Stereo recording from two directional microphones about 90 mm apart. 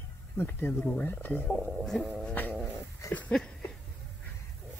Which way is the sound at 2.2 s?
20° left (ahead or behind).